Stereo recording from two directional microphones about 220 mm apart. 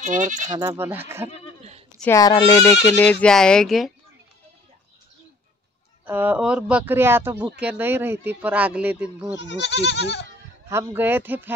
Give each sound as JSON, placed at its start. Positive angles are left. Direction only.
{"t": 0.0, "sound": "speech", "side_deg": -35}
{"t": 0.6, "sound": "speech", "side_deg": -10}
{"t": 2.0, "sound": "speech", "side_deg": 10}
{"t": 6.0, "sound": "speech", "side_deg": -10}
{"t": 9.4, "sound": "speech", "side_deg": 55}
{"t": 10.7, "sound": "speech", "side_deg": -10}